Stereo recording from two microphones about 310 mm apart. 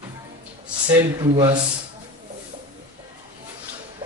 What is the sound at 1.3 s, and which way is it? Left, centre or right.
Speech, right.